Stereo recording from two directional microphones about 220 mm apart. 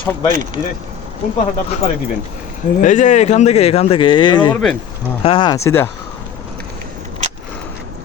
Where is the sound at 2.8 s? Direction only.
35° left (ahead or behind); by 5.8 s 10° left (ahead or behind).